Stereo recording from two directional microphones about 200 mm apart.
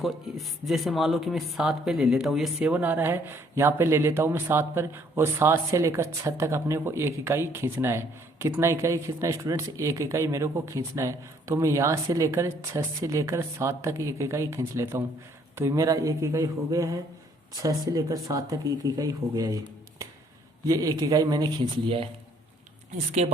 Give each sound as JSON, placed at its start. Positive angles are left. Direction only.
{"t": 0.0, "sound": "speech", "side_deg": 0}
{"t": 20.7, "sound": "speech", "side_deg": -15}
{"t": 23.2, "sound": "speech", "side_deg": -30}